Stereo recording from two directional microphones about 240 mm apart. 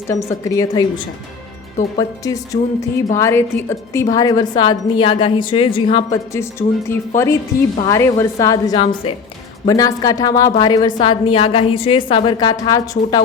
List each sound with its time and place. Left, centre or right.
0.1 s a woman's voice: centre